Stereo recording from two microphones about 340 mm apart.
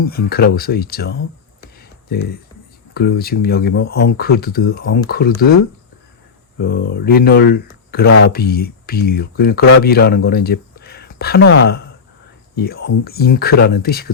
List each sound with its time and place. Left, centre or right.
0.0 s speech: left
1.8 s a sound: left
2.9 s speech: left
6.6 s speech: left